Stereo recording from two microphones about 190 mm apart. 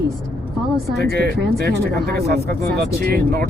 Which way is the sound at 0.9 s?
60° right (ahead or behind).